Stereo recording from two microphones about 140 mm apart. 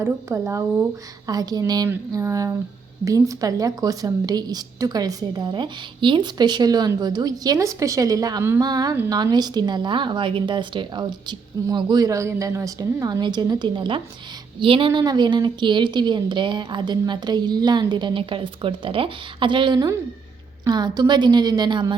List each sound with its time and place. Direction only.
0.0 s a woman's voice: 20° right (ahead or behind)